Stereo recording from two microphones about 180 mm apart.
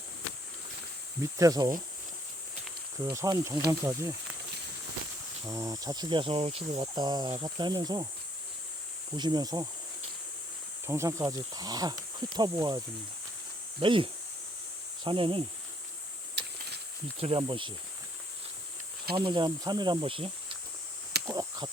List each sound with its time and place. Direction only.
1.2 s speech: 20° right (ahead or behind)
3.0 s speech: 20° right (ahead or behind)
5.5 s speech: 20° right (ahead or behind)
9.1 s speech: 25° right (ahead or behind)
10.8 s speech: 15° right (ahead or behind)
17.2 s speech: 30° right (ahead or behind)
19.1 s speech: 25° right (ahead or behind)
21.2 s a sound: 20° right (ahead or behind)